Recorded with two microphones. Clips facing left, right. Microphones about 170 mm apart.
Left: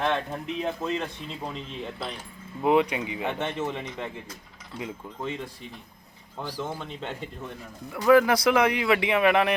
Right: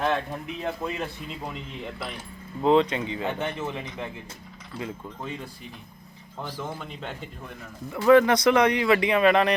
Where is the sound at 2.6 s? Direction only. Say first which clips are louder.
Right 2 dB; 15° left (ahead or behind).